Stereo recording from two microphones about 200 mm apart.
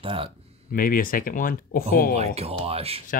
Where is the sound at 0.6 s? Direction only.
45° left (ahead or behind).